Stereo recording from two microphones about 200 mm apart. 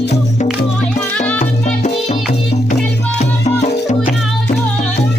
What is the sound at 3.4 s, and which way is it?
Music, 35° left (ahead or behind).